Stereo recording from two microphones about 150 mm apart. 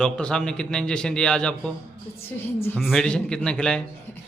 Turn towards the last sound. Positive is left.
turn(degrees=5)  # may be behind; listen again after turning